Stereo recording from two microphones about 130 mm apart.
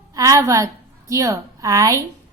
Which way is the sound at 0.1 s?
25° right (ahead or behind).